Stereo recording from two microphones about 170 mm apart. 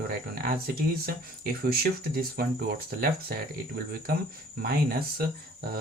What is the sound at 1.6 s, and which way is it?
Speech, 65° right (ahead or behind).